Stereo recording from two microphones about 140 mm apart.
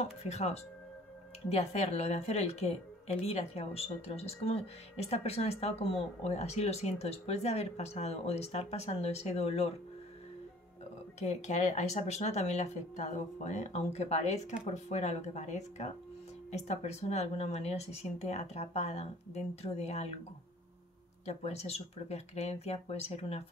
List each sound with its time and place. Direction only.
0.0 s a woman's voice: 50° left (ahead or behind)
11.1 s a woman's voice: 50° left (ahead or behind)
21.3 s a woman's voice: 50° left (ahead or behind)